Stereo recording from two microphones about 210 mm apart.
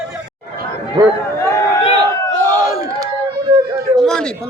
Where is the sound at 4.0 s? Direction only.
5° left (ahead or behind).